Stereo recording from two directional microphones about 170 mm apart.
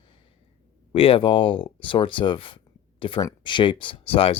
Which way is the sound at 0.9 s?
30° left (ahead or behind).